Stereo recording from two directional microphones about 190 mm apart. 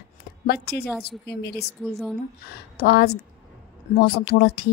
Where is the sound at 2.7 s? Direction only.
55° left (ahead or behind).